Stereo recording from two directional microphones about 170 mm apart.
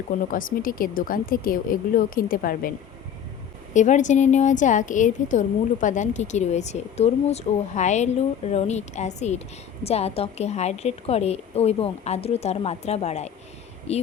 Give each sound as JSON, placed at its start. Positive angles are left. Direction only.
{"t": 0.3, "sound": "speech", "side_deg": 55}
{"t": 3.8, "sound": "a woman's voice", "side_deg": 45}